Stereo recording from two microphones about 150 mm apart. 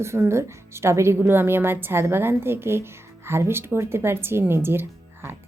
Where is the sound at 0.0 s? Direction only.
15° right (ahead or behind).